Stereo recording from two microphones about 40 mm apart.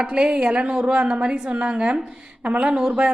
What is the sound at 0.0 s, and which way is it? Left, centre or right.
A woman's voice, right.